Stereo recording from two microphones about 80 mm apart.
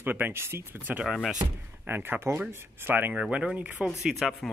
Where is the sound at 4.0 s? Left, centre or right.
Centre.